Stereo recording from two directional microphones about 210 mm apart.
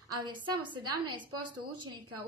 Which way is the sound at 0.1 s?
20° right (ahead or behind).